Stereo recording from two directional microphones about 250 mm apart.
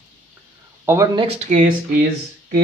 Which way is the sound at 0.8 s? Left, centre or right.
Centre.